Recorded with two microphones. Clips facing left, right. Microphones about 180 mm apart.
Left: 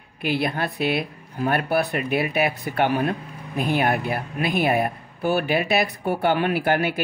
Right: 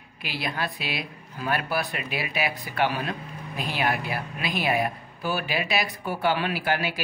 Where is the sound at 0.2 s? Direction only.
55° left (ahead or behind).